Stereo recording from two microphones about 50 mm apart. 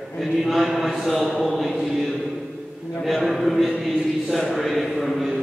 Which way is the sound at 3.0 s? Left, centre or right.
Centre.